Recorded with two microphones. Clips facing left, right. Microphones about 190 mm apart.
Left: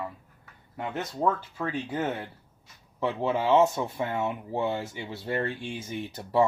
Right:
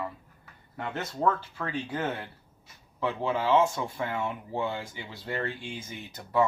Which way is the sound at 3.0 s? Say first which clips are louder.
Left 2 dB; 25° left (ahead or behind).